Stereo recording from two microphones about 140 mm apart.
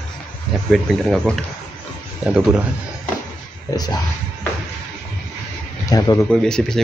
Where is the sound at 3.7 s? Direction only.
30° left (ahead or behind).